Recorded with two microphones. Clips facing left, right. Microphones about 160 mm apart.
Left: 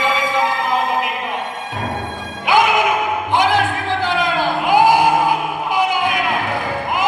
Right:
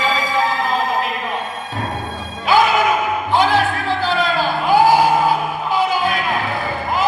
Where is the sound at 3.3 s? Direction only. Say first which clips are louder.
Right 1 dB; 20° left (ahead or behind).